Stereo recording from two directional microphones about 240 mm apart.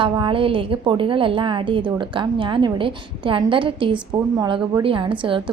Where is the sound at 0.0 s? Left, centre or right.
Right.